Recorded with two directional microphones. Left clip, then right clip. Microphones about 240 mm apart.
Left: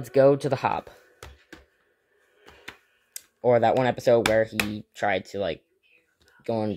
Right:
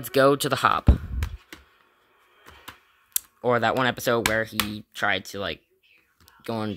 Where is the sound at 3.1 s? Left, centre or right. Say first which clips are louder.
Left 2 dB; centre.